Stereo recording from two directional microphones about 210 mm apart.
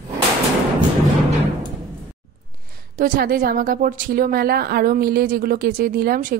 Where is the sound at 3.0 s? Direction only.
40° right (ahead or behind).